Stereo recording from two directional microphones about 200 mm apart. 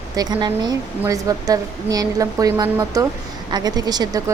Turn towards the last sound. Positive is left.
turn(degrees=-20)  # may be behind; listen again after turning